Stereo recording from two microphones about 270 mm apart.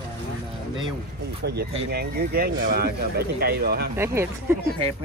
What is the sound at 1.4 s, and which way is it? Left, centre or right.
Speech, right.